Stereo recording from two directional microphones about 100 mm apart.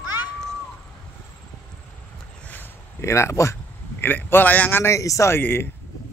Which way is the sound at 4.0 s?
20° left (ahead or behind).